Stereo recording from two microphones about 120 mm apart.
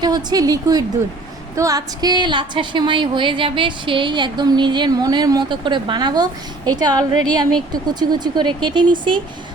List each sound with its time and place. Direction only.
0.0 s a woman's voice: 35° right (ahead or behind)